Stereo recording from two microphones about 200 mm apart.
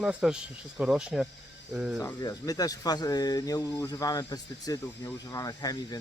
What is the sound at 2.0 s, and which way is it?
Speech, 20° left (ahead or behind).